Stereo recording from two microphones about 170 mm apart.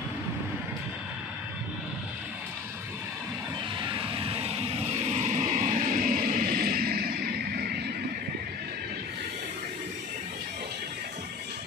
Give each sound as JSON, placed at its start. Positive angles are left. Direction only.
{"t": 3.8, "sound": "music", "side_deg": -30}